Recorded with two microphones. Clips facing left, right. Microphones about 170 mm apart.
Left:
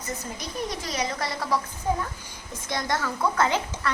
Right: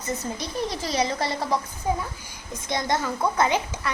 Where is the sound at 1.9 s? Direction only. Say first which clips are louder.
Right 1 dB; 15° right (ahead or behind).